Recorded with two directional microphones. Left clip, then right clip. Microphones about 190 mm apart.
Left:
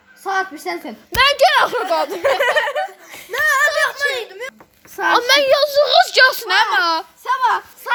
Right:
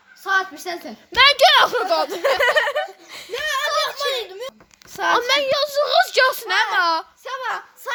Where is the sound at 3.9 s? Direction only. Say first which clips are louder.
Left 3 dB; 35° right (ahead or behind).